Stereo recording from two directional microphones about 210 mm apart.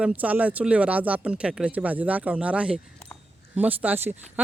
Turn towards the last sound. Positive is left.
turn(degrees=-10)  # may be behind; listen again after turning